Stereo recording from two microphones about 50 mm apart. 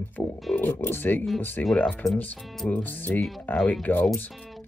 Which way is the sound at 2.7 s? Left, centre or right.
Left.